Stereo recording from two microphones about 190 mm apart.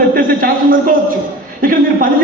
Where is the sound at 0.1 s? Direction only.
50° right (ahead or behind).